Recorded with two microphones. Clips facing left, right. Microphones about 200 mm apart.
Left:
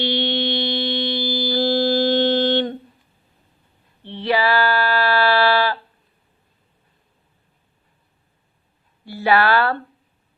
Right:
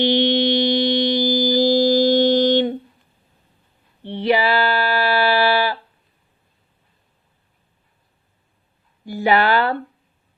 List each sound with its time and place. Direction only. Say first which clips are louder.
0.0 s mantra: right 5 dB; 15° right (ahead or behind)
4.0 s a sound: right 2 dB; 15° right (ahead or behind)
9.0 s speech: even; 15° right (ahead or behind)